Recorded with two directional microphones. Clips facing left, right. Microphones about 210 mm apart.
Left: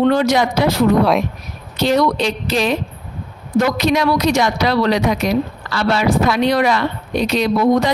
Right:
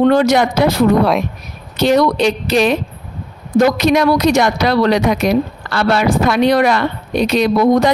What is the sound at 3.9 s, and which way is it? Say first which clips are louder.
Speech: right 3 dB; 55° right (ahead or behind).